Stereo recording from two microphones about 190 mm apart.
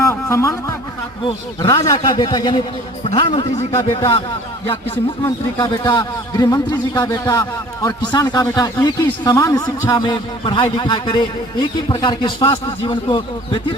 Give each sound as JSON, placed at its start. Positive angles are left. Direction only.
{"t": 0.0, "sound": "a sound", "side_deg": 15}
{"t": 1.2, "sound": "a man's voice", "side_deg": 25}
{"t": 5.2, "sound": "a man's voice", "side_deg": 15}